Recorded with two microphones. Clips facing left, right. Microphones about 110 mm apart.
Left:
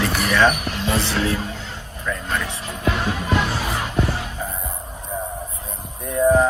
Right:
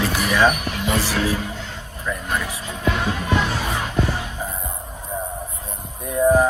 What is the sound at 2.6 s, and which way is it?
Music, centre (ahead or behind).